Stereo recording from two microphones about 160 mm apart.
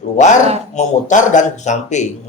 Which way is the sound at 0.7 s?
50° left (ahead or behind).